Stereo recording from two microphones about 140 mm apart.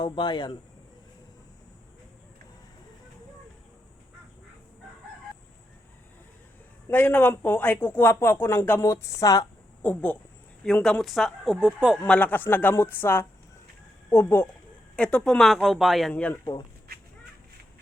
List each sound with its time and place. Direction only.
0.0 s speech: 30° left (ahead or behind)
6.8 s speech: 15° left (ahead or behind)
9.8 s speech: 10° left (ahead or behind); by 11.9 s 5° right (ahead or behind)
11.9 s speech: 10° left (ahead or behind)
14.9 s speech: 10° left (ahead or behind)